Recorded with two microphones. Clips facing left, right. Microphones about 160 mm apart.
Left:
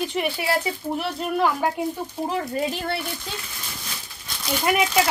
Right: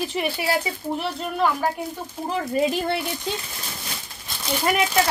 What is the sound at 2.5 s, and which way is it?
Speech, 15° right (ahead or behind).